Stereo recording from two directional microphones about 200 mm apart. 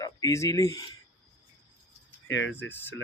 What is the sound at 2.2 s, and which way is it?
Speech, 70° left (ahead or behind).